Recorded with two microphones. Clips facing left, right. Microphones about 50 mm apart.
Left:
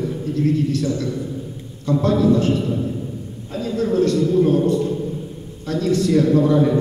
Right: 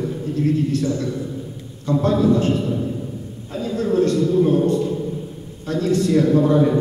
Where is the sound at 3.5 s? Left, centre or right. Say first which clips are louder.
Even; right.